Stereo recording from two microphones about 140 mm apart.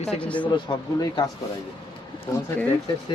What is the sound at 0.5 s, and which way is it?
Speech, 35° left (ahead or behind).